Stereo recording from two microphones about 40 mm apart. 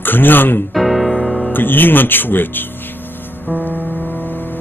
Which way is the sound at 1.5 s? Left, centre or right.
Left.